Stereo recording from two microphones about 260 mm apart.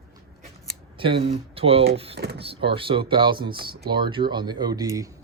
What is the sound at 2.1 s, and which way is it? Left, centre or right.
Speech, right.